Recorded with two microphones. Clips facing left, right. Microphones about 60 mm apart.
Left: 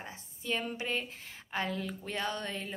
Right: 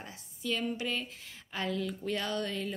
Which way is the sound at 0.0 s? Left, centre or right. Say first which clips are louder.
Right 2 dB; left.